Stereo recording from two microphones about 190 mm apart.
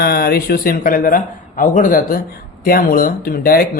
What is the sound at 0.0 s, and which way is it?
Speech, 55° left (ahead or behind).